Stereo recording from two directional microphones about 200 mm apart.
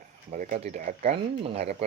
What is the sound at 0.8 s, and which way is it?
Speech, 45° right (ahead or behind).